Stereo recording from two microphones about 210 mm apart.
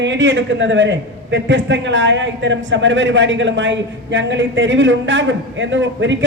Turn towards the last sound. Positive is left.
turn(degrees=-60)  # may be behind; listen again after turning